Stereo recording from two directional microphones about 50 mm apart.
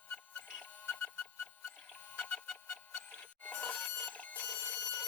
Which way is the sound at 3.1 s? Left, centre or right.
Left.